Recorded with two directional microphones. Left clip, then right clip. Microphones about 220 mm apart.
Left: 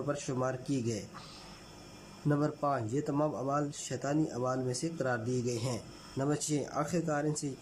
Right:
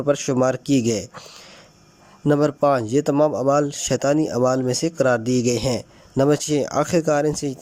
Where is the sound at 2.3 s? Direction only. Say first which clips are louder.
Right 14 dB; 40° right (ahead or behind).